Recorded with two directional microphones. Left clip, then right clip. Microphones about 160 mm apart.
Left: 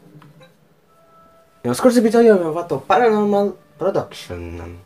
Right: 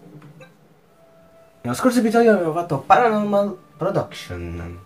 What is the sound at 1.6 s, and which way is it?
Speech, 65° left (ahead or behind).